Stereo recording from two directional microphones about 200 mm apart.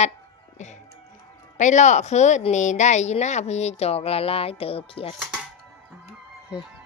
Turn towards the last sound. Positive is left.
turn(degrees=30)  # may be behind; listen again after turning